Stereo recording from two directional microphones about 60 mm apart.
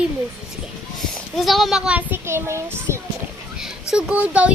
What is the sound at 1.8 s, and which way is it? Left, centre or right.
Speech, right.